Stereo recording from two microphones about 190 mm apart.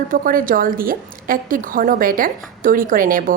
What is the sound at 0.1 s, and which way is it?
A woman's voice, 45° right (ahead or behind).